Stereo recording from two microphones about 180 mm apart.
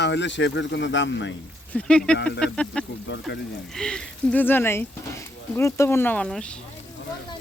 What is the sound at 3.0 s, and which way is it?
Speech, 85° left.